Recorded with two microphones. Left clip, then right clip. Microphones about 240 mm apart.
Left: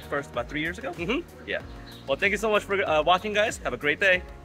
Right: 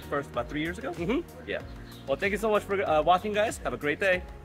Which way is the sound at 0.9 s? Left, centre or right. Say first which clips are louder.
Even; right.